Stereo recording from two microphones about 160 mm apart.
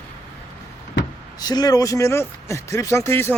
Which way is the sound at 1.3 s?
25° left (ahead or behind).